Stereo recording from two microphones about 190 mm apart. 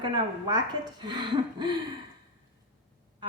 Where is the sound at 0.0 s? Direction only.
20° right (ahead or behind).